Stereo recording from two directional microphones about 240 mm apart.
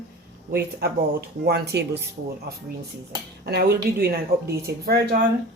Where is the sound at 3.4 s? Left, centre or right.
Right.